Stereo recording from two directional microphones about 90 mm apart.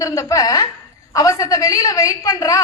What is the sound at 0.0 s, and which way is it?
A woman's voice, 35° left (ahead or behind).